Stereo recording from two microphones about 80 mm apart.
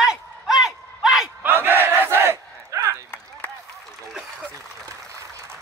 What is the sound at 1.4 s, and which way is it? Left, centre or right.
Battle cry, right.